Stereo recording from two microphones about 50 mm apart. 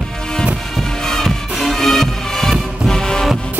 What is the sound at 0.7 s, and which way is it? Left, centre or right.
Music, centre.